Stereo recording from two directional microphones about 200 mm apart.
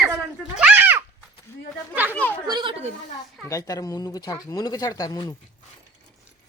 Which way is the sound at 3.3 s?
15° left (ahead or behind).